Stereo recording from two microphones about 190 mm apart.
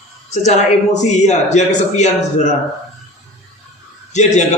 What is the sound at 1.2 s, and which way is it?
A man's voice, 40° left (ahead or behind).